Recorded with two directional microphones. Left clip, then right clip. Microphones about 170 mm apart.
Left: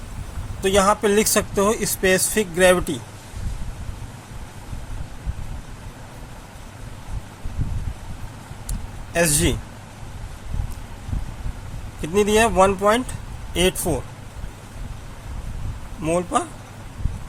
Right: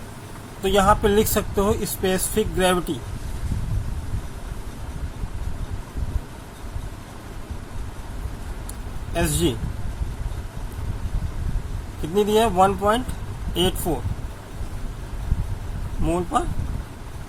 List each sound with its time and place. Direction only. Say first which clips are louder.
0.6 s speech: even; 55° left (ahead or behind)
9.1 s speech: left 3 dB; 55° left (ahead or behind)
12.1 s speech: left 2 dB; 50° left (ahead or behind)
16.0 s speech: left 2 dB; 50° left (ahead or behind)